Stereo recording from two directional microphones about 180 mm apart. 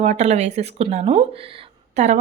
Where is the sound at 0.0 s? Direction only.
40° right (ahead or behind).